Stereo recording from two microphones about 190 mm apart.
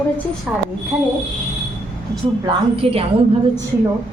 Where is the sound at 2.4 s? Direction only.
30° right (ahead or behind).